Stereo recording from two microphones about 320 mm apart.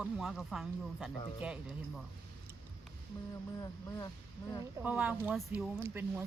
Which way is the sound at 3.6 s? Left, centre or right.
Centre.